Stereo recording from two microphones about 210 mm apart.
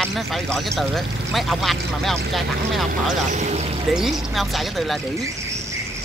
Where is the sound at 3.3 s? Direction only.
35° right (ahead or behind).